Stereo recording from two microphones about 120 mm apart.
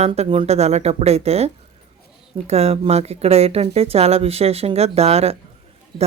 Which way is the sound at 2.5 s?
60° right (ahead or behind).